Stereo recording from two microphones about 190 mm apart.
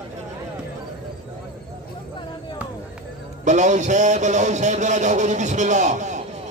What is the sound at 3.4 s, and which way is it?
A man's voice, 40° right (ahead or behind).